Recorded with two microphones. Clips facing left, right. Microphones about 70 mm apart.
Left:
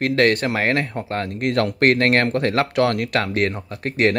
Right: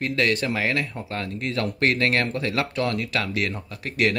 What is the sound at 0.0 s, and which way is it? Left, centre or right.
Speech, left.